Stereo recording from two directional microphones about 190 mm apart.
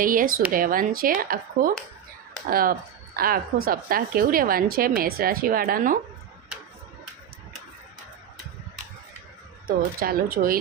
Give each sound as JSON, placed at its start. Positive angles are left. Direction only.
{"t": 0.0, "sound": "a woman's voice", "side_deg": -45}
{"t": 9.6, "sound": "a woman's voice", "side_deg": -50}